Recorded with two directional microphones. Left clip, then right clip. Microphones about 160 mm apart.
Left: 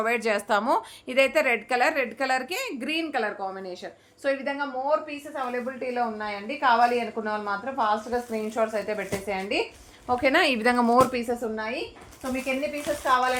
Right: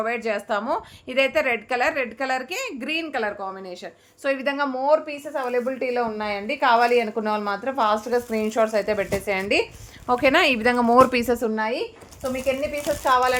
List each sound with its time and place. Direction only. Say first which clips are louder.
0.0 s speech: even; 10° left (ahead or behind)
1.1 s a woman's voice: right 1 dB; 5° right (ahead or behind)
4.2 s a woman's voice: right 2 dB; 30° right (ahead or behind)
4.9 s a woman's voice: right 6 dB; 90° right; by 9.6 s 60° right (ahead or behind)
10.1 s a woman's voice: right 4 dB; 35° right (ahead or behind)
10.3 s a woman's voice: right 3 dB; 20° right (ahead or behind)
11.1 s a woman's voice: right 6 dB; 65° right (ahead or behind); by 11.7 s 80° right
13.1 s speech: right 3 dB; 90° right